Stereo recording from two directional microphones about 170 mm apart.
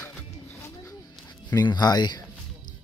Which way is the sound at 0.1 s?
15° left (ahead or behind).